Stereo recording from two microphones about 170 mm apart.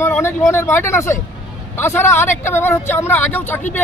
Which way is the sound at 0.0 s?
15° left (ahead or behind).